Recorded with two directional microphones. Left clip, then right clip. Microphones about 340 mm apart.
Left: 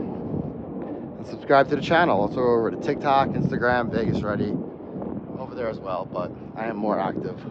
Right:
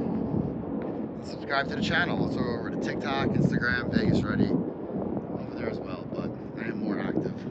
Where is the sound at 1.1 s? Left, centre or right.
Centre.